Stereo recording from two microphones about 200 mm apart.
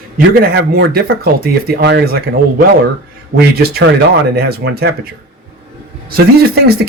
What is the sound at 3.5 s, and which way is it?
Speech, 50° right (ahead or behind).